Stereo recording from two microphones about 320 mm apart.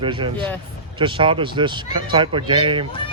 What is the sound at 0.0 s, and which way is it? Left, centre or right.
Speech, centre.